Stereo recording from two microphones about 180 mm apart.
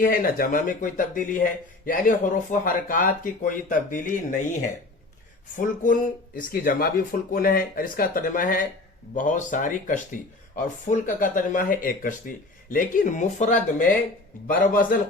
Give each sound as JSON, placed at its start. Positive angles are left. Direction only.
{"t": 0.0, "sound": "speech", "side_deg": 50}
{"t": 5.5, "sound": "speech", "side_deg": 50}